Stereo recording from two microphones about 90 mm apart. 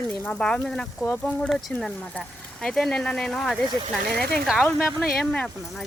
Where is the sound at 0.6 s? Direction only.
5° left (ahead or behind).